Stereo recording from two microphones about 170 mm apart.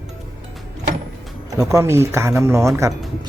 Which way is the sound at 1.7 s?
15° right (ahead or behind).